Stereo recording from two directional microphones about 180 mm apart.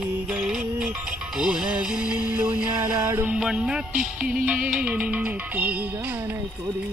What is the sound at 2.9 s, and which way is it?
Music, 15° right (ahead or behind).